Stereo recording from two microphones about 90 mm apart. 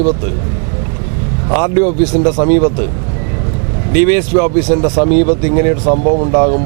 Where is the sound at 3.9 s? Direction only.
15° right (ahead or behind).